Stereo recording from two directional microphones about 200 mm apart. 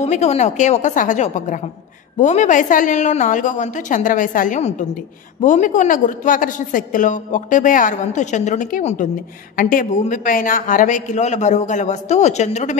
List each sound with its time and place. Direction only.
0.0 s a woman's voice: 35° left (ahead or behind)